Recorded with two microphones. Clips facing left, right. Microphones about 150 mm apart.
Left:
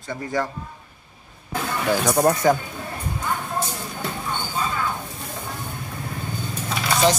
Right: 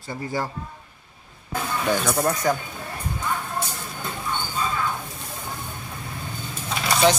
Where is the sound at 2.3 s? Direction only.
25° left (ahead or behind).